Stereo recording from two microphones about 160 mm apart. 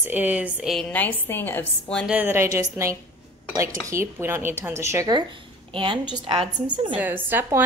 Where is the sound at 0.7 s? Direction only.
10° left (ahead or behind).